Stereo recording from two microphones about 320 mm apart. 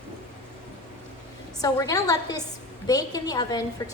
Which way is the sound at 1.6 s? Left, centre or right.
Centre.